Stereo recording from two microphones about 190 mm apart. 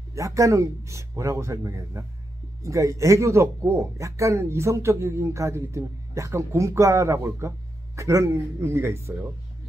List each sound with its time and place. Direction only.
0.1 s speech: 15° right (ahead or behind)